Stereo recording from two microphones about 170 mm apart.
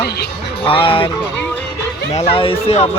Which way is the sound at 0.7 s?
30° left (ahead or behind).